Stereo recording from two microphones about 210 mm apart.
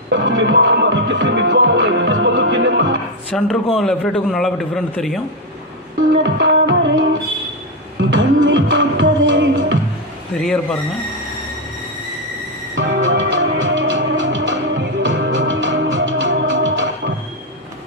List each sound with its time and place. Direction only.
0.1 s music: 65° right (ahead or behind)
3.3 s a man's voice: 5° left (ahead or behind)
6.1 s music: 60° right (ahead or behind)
10.4 s a man's voice: 5° left (ahead or behind)
12.7 s music: 60° right (ahead or behind)